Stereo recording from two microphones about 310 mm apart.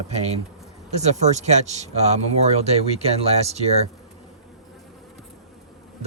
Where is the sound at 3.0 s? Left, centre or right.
Centre.